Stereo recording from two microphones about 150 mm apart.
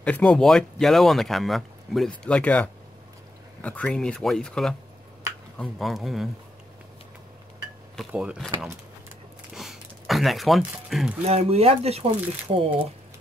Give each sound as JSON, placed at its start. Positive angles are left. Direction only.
{"t": 0.0, "sound": "speech", "side_deg": 5}
{"t": 8.1, "sound": "speech", "side_deg": -5}
{"t": 9.6, "sound": "a sound", "side_deg": 0}
{"t": 11.2, "sound": "speech", "side_deg": -45}